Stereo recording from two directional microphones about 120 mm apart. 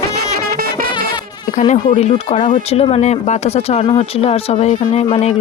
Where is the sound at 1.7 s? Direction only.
70° left (ahead or behind).